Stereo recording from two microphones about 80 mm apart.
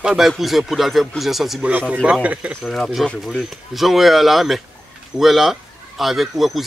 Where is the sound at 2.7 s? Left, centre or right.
Centre.